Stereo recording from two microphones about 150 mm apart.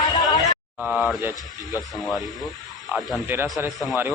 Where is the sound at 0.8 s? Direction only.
Centre (ahead or behind).